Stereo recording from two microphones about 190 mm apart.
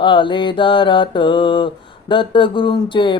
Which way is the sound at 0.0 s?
25° left (ahead or behind).